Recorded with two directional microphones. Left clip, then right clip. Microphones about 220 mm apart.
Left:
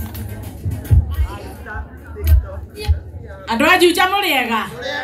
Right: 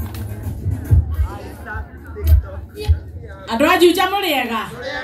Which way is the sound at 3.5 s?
15° left (ahead or behind).